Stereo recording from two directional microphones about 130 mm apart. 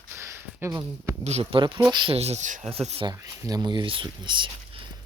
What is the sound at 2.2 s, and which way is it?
Speech, 60° right (ahead or behind).